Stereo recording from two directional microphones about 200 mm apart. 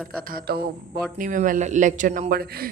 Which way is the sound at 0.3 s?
50° right (ahead or behind).